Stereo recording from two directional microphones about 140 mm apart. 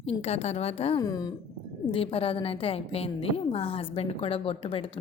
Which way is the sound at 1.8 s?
40° left (ahead or behind).